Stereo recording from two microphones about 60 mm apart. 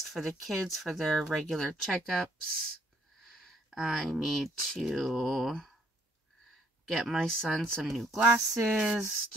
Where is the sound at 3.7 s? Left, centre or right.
Centre.